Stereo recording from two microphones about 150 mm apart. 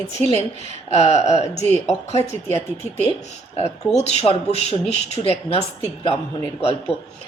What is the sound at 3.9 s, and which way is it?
Speech, 45° left (ahead or behind).